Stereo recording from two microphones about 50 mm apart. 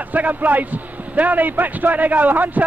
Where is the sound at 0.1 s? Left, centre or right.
Right.